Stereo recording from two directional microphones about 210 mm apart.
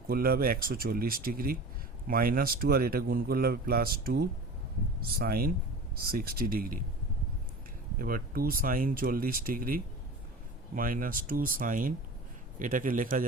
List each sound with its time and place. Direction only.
0.1 s a man's voice: 45° right (ahead or behind)
7.9 s a man's voice: 45° right (ahead or behind)